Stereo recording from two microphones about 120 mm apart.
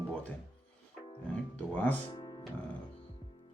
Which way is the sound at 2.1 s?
40° left (ahead or behind).